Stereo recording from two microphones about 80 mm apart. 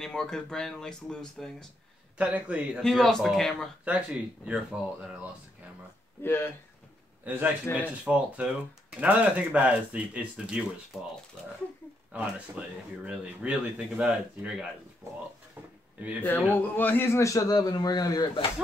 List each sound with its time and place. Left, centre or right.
0.0 s speech: centre
2.1 s speech: centre
2.9 s speech: centre
3.8 s speech: centre
6.2 s speech: left
7.2 s speech: right
12.1 s speech: centre
16.0 s speech: centre
16.3 s a man's voice: left
17.2 s speech: left